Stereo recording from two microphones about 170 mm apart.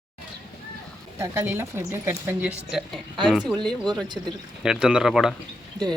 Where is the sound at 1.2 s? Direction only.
15° right (ahead or behind).